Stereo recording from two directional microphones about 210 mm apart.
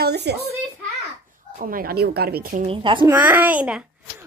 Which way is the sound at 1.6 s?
45° right (ahead or behind).